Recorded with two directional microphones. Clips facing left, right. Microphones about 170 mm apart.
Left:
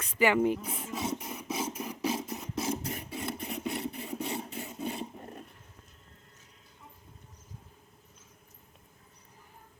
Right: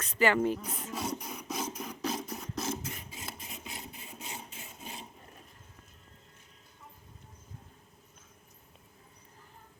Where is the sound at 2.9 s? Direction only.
60° left (ahead or behind).